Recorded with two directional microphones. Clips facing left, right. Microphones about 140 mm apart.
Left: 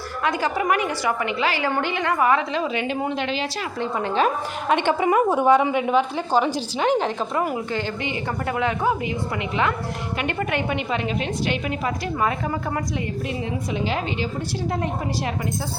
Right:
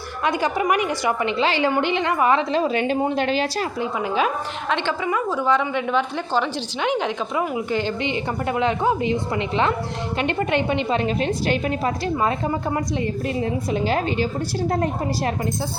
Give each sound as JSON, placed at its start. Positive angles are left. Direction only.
{"t": 0.3, "sound": "a woman's voice", "side_deg": -20}
{"t": 2.5, "sound": "a woman's voice", "side_deg": -40}
{"t": 3.8, "sound": "a woman's voice", "side_deg": -5}
{"t": 4.8, "sound": "a woman's voice", "side_deg": 50}
{"t": 5.7, "sound": "a woman's voice", "side_deg": 5}
{"t": 7.5, "sound": "a woman's voice", "side_deg": -15}
{"t": 13.4, "sound": "a woman's voice", "side_deg": -40}